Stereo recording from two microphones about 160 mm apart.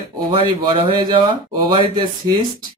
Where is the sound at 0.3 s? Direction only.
35° right (ahead or behind).